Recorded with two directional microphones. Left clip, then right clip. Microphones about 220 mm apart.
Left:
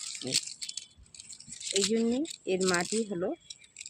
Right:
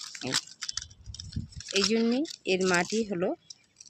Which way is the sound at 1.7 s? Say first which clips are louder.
Right 2 dB; 35° right (ahead or behind).